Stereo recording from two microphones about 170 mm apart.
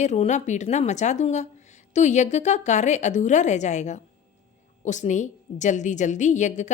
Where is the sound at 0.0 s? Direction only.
45° left (ahead or behind).